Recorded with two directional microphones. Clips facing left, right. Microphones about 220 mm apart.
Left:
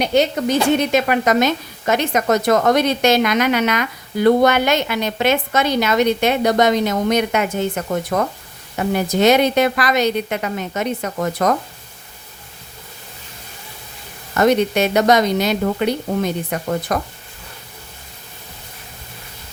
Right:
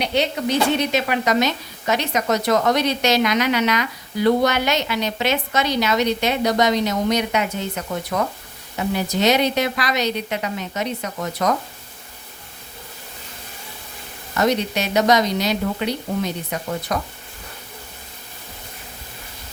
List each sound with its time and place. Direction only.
0.0 s a woman's voice: 45° left (ahead or behind)
14.3 s a woman's voice: 55° left (ahead or behind)